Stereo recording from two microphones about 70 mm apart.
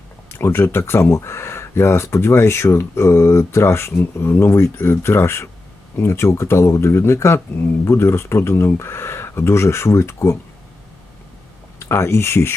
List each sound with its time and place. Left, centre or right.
0.3 s speech: left
11.8 s speech: left